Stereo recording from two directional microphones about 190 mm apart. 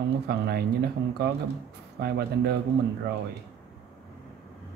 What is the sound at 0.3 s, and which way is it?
Speech, 55° right (ahead or behind).